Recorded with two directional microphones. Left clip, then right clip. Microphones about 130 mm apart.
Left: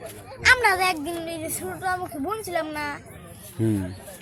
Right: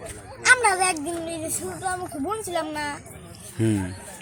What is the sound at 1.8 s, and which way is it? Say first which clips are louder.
Speech: left 2 dB; 20° right (ahead or behind).